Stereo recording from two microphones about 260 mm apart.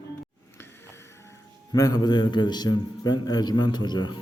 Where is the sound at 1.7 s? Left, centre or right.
Centre.